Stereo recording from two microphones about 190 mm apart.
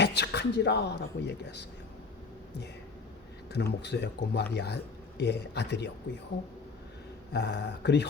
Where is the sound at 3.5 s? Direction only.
65° left (ahead or behind).